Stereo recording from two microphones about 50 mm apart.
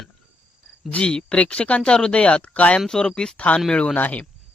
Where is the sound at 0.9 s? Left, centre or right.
Centre.